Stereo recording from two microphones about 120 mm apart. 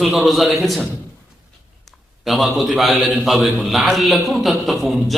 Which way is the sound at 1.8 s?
Centre (ahead or behind).